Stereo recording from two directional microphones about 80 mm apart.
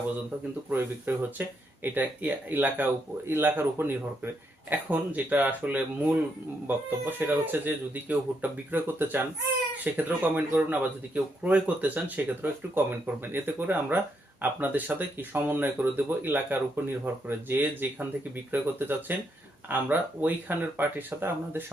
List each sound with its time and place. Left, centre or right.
0.7 s a man's voice: right